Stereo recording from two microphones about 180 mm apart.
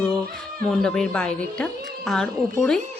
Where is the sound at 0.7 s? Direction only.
5° left (ahead or behind).